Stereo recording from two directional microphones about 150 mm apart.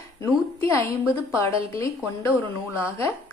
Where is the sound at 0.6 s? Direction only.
20° left (ahead or behind).